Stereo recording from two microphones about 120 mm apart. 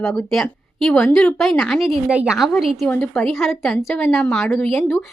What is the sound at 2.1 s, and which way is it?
Speech, 10° right (ahead or behind).